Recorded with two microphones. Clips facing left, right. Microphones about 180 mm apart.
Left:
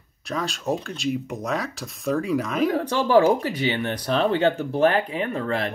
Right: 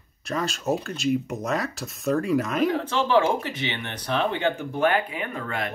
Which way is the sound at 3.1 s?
40° left (ahead or behind).